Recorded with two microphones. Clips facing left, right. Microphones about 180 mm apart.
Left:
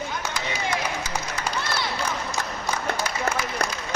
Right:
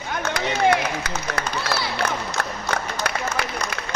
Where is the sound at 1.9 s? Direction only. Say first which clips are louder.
Right 3 dB; 65° right (ahead or behind).